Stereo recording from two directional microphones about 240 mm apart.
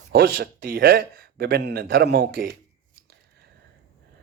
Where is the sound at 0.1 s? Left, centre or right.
Right.